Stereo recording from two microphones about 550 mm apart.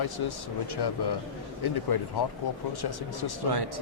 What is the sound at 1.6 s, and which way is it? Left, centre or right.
Speech, left.